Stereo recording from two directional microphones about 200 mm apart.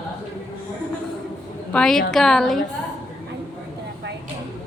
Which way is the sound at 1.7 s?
5° left (ahead or behind).